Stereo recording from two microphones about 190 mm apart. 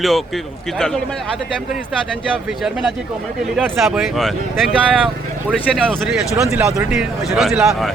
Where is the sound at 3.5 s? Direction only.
Centre (ahead or behind).